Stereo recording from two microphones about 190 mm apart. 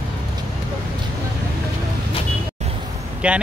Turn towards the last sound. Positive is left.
turn(degrees=-5)  # may be behind; listen again after turning